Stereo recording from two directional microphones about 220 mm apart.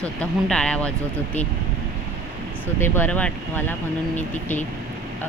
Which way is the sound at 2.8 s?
10° left (ahead or behind).